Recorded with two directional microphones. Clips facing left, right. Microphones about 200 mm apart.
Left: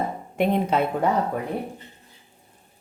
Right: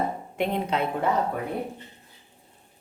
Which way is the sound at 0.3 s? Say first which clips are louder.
Left 5 dB; 45° left (ahead or behind).